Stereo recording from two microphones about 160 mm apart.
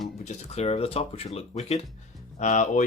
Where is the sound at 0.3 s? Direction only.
40° left (ahead or behind).